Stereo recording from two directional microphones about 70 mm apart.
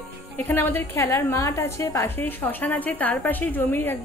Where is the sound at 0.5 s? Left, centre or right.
Left.